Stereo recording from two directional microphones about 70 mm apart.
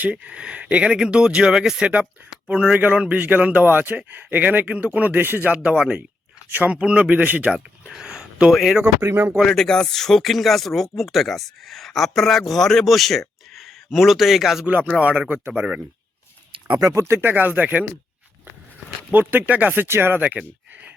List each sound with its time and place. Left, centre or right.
0.0 s a man's voice: centre
5.6 s speech: centre
6.5 s a man's voice: right; by 8.8 s centre
9.0 s speech: right
9.4 s speech: centre
14.6 s a man's voice: right
16.6 s speech: right
16.9 s a man's voice: right
19.1 s a man's voice: right
20.2 s a sound: right